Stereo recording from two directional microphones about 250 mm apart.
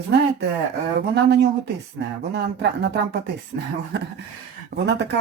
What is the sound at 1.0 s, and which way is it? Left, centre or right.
Speech, right.